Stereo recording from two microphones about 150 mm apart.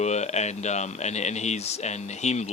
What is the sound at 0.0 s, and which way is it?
Speech, 50° left (ahead or behind).